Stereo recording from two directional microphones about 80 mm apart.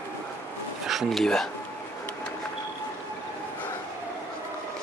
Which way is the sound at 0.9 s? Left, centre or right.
Centre.